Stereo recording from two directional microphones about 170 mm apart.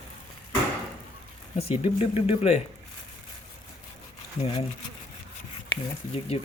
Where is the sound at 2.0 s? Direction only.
35° left (ahead or behind).